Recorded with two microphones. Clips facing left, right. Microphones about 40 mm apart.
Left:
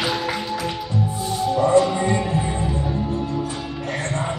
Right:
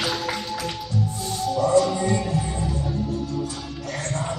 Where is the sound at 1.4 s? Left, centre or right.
Left.